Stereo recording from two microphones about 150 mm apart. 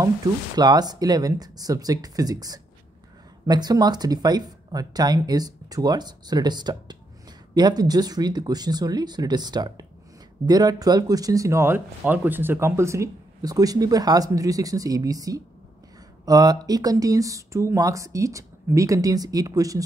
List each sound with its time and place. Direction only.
0.0 s speech: 25° right (ahead or behind)